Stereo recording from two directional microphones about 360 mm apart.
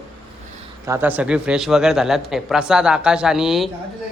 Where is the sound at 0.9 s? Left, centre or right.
Centre.